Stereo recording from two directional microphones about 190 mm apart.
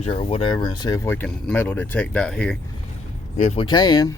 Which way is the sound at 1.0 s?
10° left (ahead or behind).